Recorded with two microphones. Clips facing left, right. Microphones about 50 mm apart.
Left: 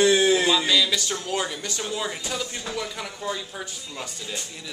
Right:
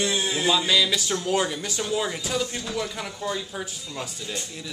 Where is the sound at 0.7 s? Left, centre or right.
Centre.